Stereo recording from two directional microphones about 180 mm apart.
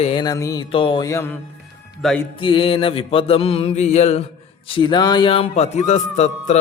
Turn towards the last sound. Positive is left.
turn(degrees=40)  # may be behind; listen again after turning